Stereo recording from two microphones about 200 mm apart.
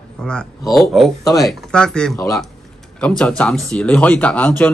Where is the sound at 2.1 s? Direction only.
15° left (ahead or behind).